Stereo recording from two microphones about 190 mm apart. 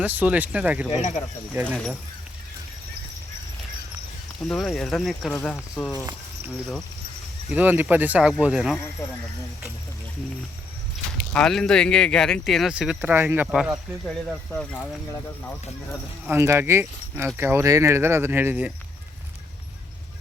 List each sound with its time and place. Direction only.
0.0 s speech: 10° right (ahead or behind)
4.4 s speech: centre (ahead or behind)
7.5 s speech: 10° right (ahead or behind)
9.0 s speech: 15° left (ahead or behind)
11.3 s speech: 5° left (ahead or behind)
14.5 s speech: 5° left (ahead or behind)
16.2 s speech: 15° right (ahead or behind)